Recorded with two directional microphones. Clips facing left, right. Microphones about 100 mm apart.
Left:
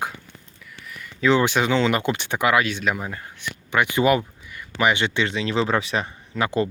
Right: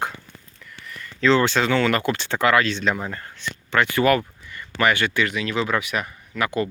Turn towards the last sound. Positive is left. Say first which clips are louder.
# left 1 dB
turn(degrees=30)  # may be behind; listen again after turning